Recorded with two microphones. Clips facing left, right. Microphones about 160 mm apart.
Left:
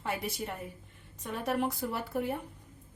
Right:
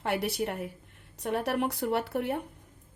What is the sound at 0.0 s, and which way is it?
A woman's voice, 70° right (ahead or behind).